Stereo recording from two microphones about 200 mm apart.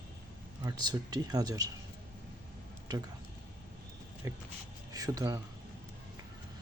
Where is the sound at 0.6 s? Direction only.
20° right (ahead or behind).